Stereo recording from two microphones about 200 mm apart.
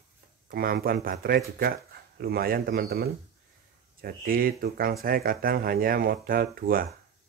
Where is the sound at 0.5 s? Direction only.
50° right (ahead or behind).